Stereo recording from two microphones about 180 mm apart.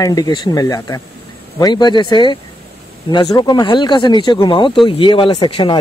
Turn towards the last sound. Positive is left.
turn(degrees=25)  # may be behind; listen again after turning